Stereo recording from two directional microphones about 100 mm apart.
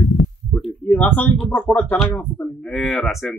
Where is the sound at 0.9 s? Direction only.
15° left (ahead or behind).